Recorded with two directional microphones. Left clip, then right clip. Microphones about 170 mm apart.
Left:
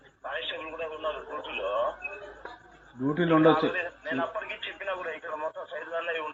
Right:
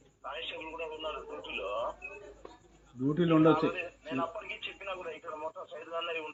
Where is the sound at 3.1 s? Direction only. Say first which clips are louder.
Left 4 dB; 25° right (ahead or behind).